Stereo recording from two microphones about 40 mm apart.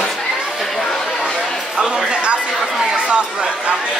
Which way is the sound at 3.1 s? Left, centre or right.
Right.